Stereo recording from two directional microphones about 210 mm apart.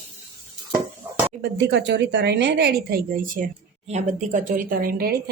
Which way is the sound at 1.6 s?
55° right (ahead or behind).